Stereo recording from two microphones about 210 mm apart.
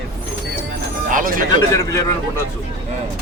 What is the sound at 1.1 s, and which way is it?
Speech, 40° right (ahead or behind).